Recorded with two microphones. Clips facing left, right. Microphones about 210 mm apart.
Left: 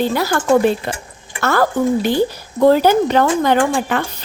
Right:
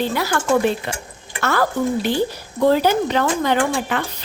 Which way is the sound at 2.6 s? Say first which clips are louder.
Left 4 dB; 45° left (ahead or behind).